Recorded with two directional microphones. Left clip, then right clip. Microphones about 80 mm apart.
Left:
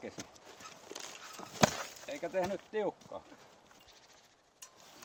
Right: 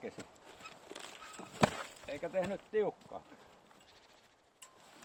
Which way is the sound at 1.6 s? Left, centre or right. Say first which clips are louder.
Left 2 dB; left.